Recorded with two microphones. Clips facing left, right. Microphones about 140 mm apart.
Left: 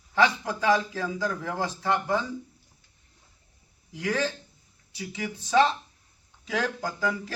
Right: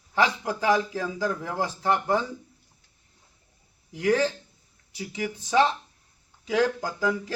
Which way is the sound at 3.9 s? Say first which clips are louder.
Right 6 dB; 20° right (ahead or behind).